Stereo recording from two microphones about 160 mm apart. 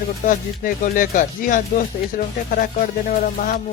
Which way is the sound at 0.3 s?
55° left (ahead or behind).